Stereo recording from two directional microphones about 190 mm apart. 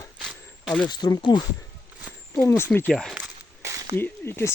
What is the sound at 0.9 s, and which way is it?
Speech, 20° left (ahead or behind).